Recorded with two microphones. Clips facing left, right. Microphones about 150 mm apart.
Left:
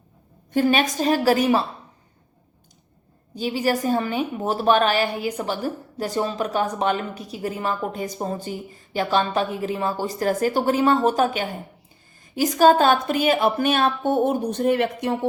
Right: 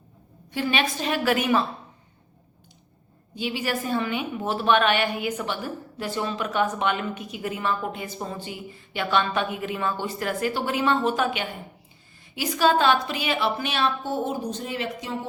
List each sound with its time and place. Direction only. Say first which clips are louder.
0.5 s a woman's voice: left 6 dB; 45° left (ahead or behind)
3.3 s a woman's voice: left 5 dB; 40° left (ahead or behind); by 15.3 s 60° left (ahead or behind)